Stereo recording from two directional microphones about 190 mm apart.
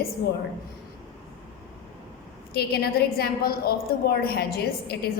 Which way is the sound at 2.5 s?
55° left (ahead or behind).